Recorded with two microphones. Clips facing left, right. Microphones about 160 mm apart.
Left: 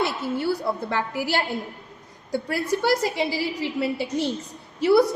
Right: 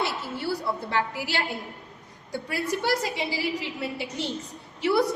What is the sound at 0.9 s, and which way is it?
A woman's voice, 40° left (ahead or behind).